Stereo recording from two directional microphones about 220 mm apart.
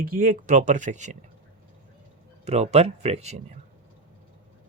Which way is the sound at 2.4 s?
30° right (ahead or behind).